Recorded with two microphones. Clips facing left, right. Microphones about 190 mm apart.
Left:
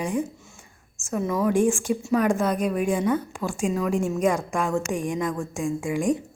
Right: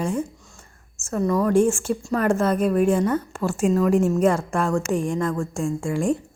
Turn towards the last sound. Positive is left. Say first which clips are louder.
# right 1 dB
turn(degrees=15)  # may be behind; listen again after turning